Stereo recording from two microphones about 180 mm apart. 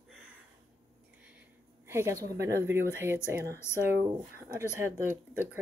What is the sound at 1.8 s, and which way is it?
Speech, 15° right (ahead or behind).